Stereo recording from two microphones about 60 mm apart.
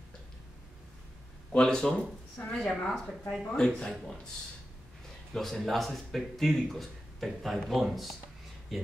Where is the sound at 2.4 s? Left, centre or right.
Left.